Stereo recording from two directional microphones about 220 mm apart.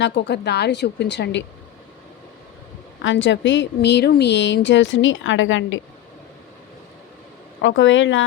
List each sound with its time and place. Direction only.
0.0 s speech: 50° left (ahead or behind)
3.0 s a woman's voice: 55° left (ahead or behind)
7.6 s a woman's voice: 60° left (ahead or behind)